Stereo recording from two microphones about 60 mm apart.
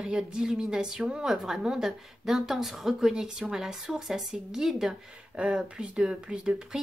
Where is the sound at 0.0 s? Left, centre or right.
Centre.